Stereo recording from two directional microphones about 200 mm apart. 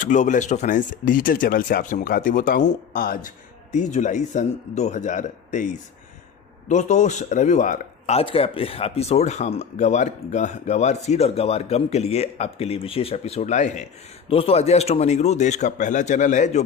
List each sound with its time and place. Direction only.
0.0 s speech: 40° left (ahead or behind)